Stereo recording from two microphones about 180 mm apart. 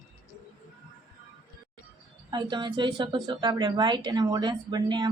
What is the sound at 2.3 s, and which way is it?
Speech, 25° right (ahead or behind).